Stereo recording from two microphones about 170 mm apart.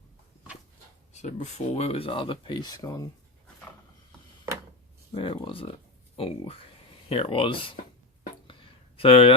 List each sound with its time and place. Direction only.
1.1 s speech: 45° left (ahead or behind); by 3.1 s 20° left (ahead or behind)
5.1 s speech: 30° left (ahead or behind)
9.0 s speech: 35° left (ahead or behind)